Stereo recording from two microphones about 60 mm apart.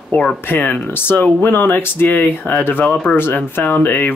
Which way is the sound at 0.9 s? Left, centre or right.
Left.